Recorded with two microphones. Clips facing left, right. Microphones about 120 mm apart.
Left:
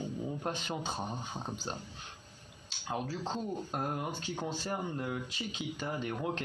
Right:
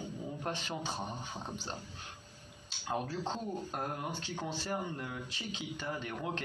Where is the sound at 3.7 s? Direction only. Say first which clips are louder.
Left 2 dB; 20° left (ahead or behind).